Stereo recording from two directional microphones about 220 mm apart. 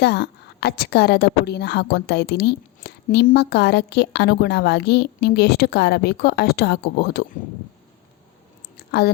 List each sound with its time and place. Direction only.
0.0 s a woman's voice: 50° left (ahead or behind)
8.9 s speech: 45° left (ahead or behind)